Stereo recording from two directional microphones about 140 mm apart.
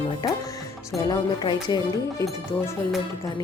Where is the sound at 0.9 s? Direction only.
30° left (ahead or behind).